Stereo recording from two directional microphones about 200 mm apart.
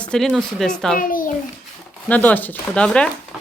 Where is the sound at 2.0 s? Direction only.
10° left (ahead or behind).